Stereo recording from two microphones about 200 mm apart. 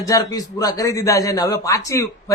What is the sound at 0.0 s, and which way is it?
A man's voice, 15° left (ahead or behind).